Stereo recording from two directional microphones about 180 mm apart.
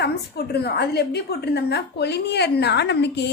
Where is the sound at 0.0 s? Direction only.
65° left (ahead or behind).